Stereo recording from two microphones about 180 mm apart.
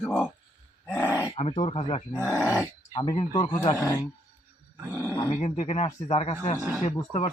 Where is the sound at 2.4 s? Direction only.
20° left (ahead or behind).